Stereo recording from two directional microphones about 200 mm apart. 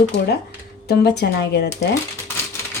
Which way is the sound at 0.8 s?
55° left (ahead or behind).